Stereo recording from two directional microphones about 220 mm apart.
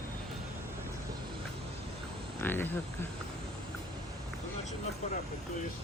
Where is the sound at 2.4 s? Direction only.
10° left (ahead or behind).